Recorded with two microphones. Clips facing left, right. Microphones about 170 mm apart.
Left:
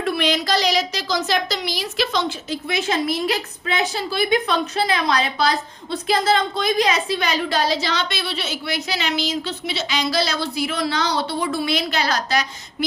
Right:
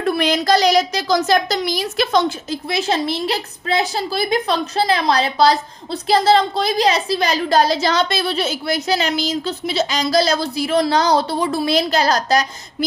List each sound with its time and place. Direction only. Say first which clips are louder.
0.0 s a woman's voice: right 3 dB; 45° right (ahead or behind)
2.6 s a woman's voice: right 2 dB; 35° right (ahead or behind)